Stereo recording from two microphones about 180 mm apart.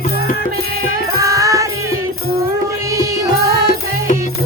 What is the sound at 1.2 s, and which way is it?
Music, 20° right (ahead or behind).